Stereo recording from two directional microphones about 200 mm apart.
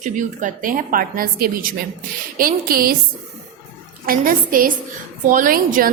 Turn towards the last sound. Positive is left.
turn(degrees=-45)  # may be behind; listen again after turning